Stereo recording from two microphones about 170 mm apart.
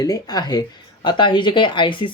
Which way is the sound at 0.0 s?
20° left (ahead or behind).